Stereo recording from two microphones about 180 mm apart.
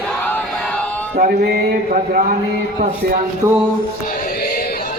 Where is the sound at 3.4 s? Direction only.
15° right (ahead or behind).